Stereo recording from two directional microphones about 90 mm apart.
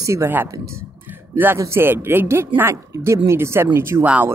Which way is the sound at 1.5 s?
30° right (ahead or behind).